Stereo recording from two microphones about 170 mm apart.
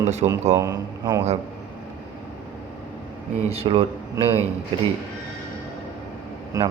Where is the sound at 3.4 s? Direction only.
35° right (ahead or behind).